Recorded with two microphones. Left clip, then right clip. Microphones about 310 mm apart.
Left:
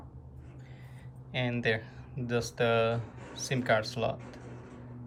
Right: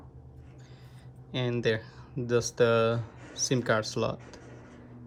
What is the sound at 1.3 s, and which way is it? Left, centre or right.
Speech, centre.